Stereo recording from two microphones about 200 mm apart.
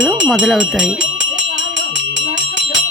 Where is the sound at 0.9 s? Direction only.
65° right (ahead or behind).